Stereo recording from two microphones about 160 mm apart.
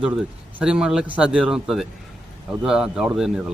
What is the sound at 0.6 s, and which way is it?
Speech, 5° right (ahead or behind).